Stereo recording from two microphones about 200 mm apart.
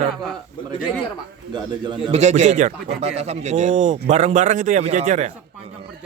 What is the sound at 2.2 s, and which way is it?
A man's voice, 35° right (ahead or behind).